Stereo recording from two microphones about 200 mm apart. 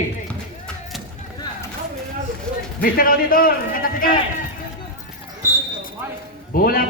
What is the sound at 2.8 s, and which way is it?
A man's voice, 45° left (ahead or behind).